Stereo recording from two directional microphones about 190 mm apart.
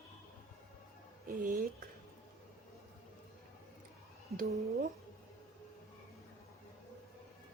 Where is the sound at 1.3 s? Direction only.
50° right (ahead or behind).